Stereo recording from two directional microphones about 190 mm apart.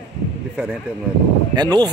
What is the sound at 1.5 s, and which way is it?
Speech, 20° right (ahead or behind).